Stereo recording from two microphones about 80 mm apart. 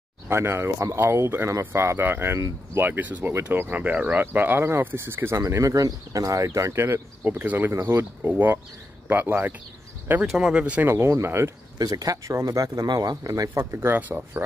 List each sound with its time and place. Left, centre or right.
0.3 s speech: right
5.4 s speech: right
7.9 s speech: right
10.2 s speech: centre
10.5 s speech: centre
10.9 s speech: right
11.8 s speech: right
13.6 s speech: right